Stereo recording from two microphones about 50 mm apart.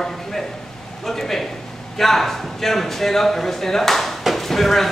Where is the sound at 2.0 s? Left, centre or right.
Centre.